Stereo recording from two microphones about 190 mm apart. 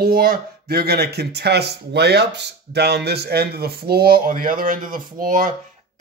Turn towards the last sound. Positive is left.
turn(degrees=-45)  # may be behind; listen again after turning